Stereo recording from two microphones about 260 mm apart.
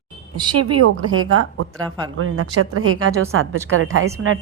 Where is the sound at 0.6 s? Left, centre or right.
Right.